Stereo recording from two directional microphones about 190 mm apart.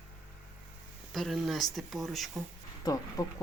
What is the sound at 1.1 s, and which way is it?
Speech, centre (ahead or behind).